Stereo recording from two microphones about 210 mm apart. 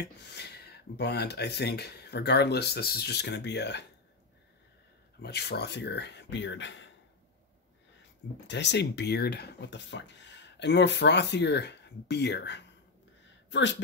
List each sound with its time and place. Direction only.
0.0 s speech: 55° left (ahead or behind)
5.2 s speech: 50° left (ahead or behind)
8.5 s speech: 55° left (ahead or behind)